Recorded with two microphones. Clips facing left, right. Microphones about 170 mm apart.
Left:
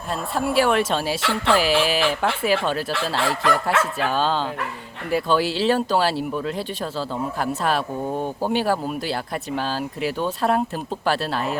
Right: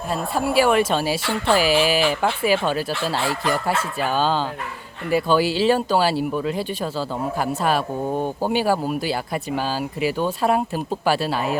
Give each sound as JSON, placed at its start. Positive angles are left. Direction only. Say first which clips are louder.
{"t": 0.3, "sound": "speech", "louder": "right 2 dB", "side_deg": 0}
{"t": 1.2, "sound": "speech", "louder": "even", "side_deg": 90}
{"t": 1.5, "sound": "speech", "louder": "right 3 dB", "side_deg": -5}
{"t": 2.9, "sound": "speech", "louder": "even", "side_deg": 90}
{"t": 4.0, "sound": "speech", "louder": "right 1 dB", "side_deg": 0}